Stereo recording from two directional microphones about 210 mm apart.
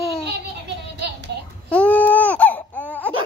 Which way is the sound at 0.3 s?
55° right (ahead or behind).